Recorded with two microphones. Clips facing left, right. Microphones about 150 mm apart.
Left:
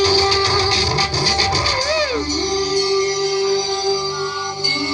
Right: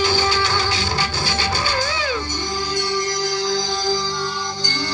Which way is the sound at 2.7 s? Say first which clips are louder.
Left 6 dB; 30° left (ahead or behind).